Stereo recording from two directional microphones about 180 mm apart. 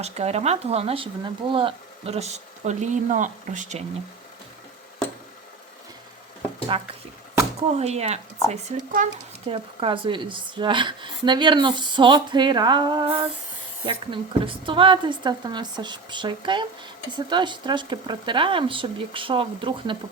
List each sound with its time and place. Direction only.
0.0 s speech: 35° right (ahead or behind)
6.7 s speech: 30° right (ahead or behind)
9.5 s speech: 30° right (ahead or behind)